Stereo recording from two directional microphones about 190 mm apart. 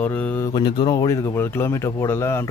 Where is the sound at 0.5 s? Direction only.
25° left (ahead or behind).